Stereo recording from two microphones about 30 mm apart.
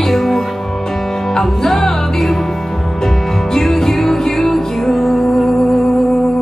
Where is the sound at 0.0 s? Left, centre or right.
Centre.